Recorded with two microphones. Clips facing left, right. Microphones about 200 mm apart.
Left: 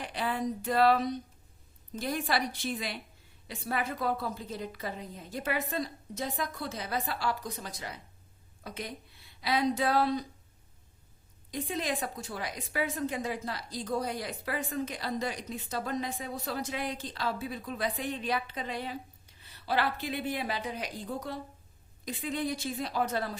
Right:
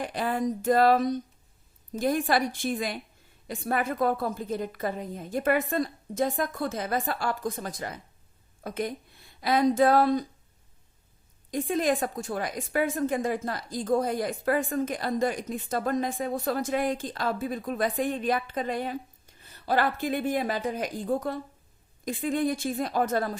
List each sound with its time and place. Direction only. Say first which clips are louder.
0.0 s a woman's voice: right 5 dB; 45° right (ahead or behind)
11.5 s a woman's voice: right 8 dB; 50° right (ahead or behind)